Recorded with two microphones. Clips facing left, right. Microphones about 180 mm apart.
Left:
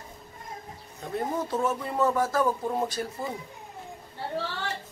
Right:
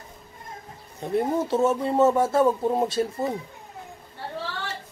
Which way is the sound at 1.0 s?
25° right (ahead or behind).